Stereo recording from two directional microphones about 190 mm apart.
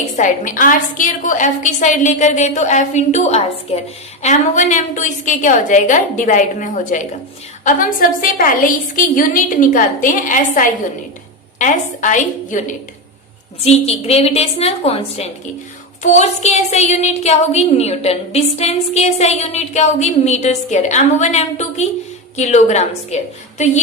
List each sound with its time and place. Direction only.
0.2 s a woman's voice: 45° left (ahead or behind)